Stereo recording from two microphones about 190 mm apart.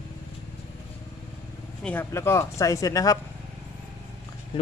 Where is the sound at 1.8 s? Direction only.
10° left (ahead or behind).